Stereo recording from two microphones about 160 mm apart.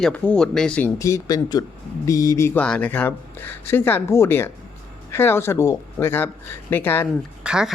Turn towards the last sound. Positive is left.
turn(degrees=-5)  # may be behind; listen again after turning